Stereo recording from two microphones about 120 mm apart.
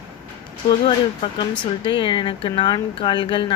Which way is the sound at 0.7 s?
45° left (ahead or behind).